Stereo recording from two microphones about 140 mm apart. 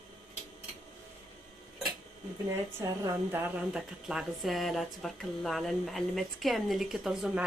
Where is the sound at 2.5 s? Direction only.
20° right (ahead or behind).